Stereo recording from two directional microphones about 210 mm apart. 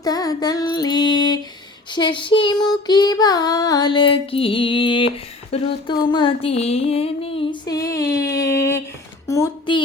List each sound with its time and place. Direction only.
0.0 s music: 15° left (ahead or behind)
2.0 s speech: 25° left (ahead or behind)